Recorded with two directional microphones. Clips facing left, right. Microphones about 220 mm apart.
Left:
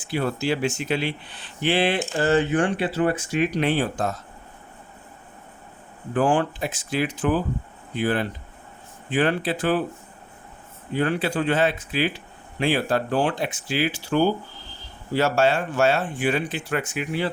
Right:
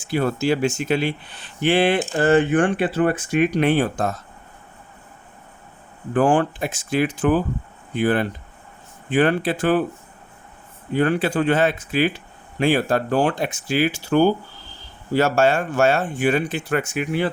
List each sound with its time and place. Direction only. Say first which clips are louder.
0.1 s speech: right 4 dB; 45° right (ahead or behind)
6.1 s speech: right 3 dB; 50° right (ahead or behind)
10.9 s speech: right 4 dB; 50° right (ahead or behind)